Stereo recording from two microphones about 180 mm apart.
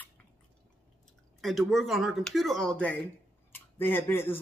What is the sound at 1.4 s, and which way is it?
A man's voice, centre (ahead or behind).